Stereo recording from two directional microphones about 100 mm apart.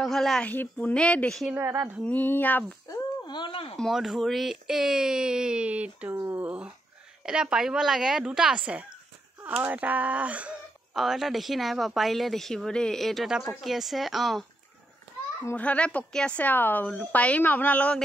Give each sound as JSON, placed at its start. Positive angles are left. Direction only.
{"t": 0.0, "sound": "speech", "side_deg": 5}
{"t": 0.5, "sound": "speech", "side_deg": 15}
{"t": 1.5, "sound": "speech", "side_deg": -25}
{"t": 2.0, "sound": "speech", "side_deg": 20}
{"t": 3.3, "sound": "speech", "side_deg": 55}
{"t": 3.7, "sound": "speech", "side_deg": 0}
{"t": 11.0, "sound": "speech", "side_deg": 0}
{"t": 15.5, "sound": "speech", "side_deg": 15}